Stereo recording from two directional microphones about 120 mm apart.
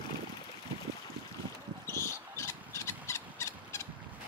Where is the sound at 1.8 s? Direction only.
25° left (ahead or behind).